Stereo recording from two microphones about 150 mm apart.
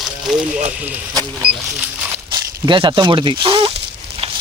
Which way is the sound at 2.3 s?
30° right (ahead or behind).